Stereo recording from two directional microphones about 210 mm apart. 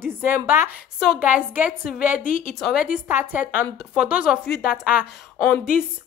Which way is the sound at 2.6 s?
Centre (ahead or behind).